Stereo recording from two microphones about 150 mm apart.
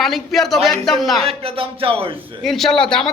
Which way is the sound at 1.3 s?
40° right (ahead or behind).